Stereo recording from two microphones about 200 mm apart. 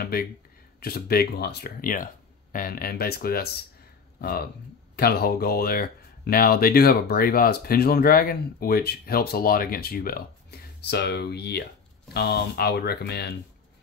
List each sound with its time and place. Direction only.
0.1 s speech: 50° left (ahead or behind)